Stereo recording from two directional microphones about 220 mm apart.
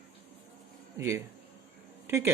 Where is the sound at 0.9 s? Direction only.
15° right (ahead or behind).